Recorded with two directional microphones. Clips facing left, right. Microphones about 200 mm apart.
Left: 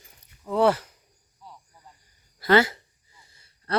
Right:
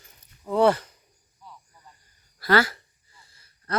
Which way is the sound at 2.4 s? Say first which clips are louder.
Left 2 dB; 20° left (ahead or behind).